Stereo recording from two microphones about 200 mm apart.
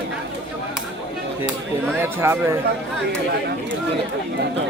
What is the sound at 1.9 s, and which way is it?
Speech, 10° right (ahead or behind).